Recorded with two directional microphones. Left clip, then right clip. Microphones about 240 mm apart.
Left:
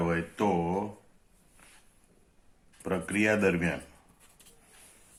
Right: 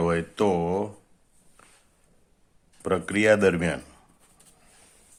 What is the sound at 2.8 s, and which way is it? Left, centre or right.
Speech, right.